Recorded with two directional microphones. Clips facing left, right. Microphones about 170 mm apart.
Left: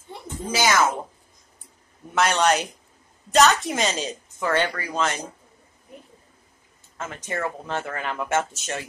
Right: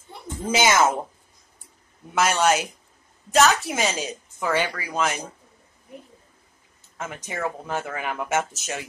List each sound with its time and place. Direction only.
0.5 s speech: 20° right (ahead or behind)
2.1 s speech: 5° right (ahead or behind)
7.2 s speech: 10° right (ahead or behind)